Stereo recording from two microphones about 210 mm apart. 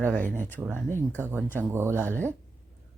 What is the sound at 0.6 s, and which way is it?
Speech, 10° right (ahead or behind).